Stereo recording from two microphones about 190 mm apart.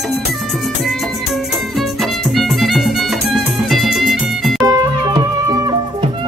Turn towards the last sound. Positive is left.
turn(degrees=-20)  # may be behind; listen again after turning